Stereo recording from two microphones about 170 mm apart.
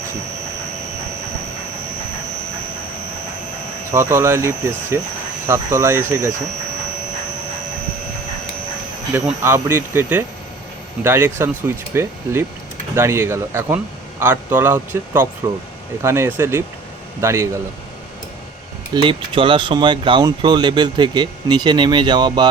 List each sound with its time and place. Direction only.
3.9 s speech: 15° right (ahead or behind)
9.4 s speech: 15° right (ahead or behind)
18.9 s speech: 30° right (ahead or behind)